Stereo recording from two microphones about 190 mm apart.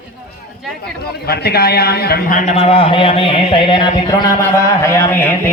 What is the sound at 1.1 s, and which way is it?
A man's voice, 55° left (ahead or behind).